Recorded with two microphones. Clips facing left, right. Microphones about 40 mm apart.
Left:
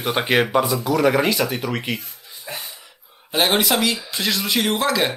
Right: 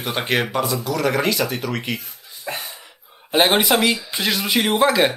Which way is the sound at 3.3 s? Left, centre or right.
Centre.